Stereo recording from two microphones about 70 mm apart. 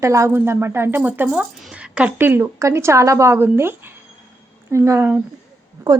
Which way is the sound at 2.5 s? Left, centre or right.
Right.